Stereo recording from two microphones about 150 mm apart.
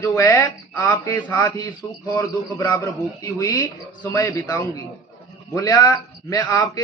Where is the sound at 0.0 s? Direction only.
15° left (ahead or behind).